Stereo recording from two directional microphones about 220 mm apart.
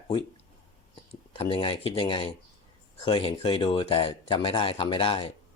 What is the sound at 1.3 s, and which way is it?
Speech, 25° left (ahead or behind).